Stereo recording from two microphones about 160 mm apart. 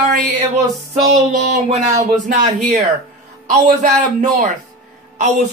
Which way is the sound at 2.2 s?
50° right (ahead or behind).